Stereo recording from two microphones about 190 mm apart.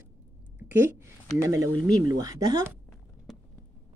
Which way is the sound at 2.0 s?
20° right (ahead or behind).